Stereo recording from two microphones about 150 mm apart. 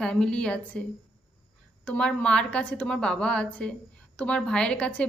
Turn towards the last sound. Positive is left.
turn(degrees=10)  # may be behind; listen again after turning